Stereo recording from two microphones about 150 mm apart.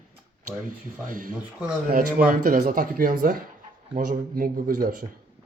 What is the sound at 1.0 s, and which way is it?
Speech, 60° right (ahead or behind).